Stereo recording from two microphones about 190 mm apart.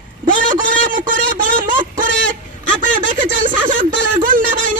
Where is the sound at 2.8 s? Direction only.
45° right (ahead or behind).